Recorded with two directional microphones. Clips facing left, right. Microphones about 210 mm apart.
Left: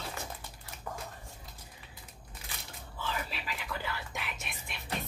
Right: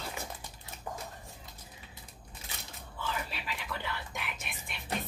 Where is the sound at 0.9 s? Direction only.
20° right (ahead or behind).